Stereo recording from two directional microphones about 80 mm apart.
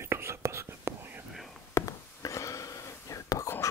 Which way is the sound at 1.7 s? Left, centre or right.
Left.